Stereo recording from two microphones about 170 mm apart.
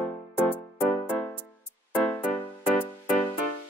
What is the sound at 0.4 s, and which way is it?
Music, 10° left (ahead or behind).